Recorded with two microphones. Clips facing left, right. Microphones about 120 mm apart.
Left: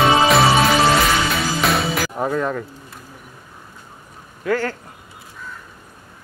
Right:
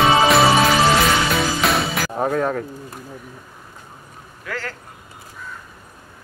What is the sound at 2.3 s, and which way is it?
Speech, 45° right (ahead or behind).